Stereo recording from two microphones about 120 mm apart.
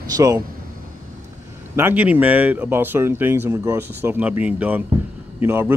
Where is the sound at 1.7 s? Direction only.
15° right (ahead or behind).